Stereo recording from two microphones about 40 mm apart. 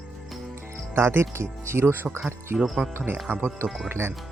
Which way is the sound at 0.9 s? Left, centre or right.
Right.